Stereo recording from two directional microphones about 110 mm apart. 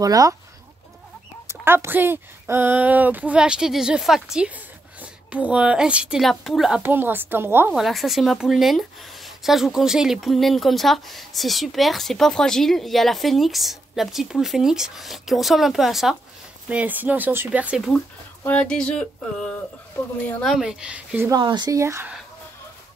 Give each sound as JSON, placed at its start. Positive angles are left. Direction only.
{"t": 0.0, "sound": "speech", "side_deg": -35}
{"t": 1.5, "sound": "a woman's voice", "side_deg": -20}
{"t": 6.8, "sound": "a woman's voice", "side_deg": -15}
{"t": 7.7, "sound": "speech", "side_deg": 0}
{"t": 16.6, "sound": "speech", "side_deg": -15}
{"t": 18.4, "sound": "a sound", "side_deg": 15}
{"t": 20.4, "sound": "speech", "side_deg": -5}
{"t": 21.3, "sound": "speech", "side_deg": -40}
{"t": 21.7, "sound": "a woman's voice", "side_deg": -25}